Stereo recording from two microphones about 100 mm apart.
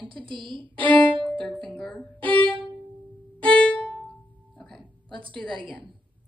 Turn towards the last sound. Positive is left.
turn(degrees=-55)  # may be behind; listen again after turning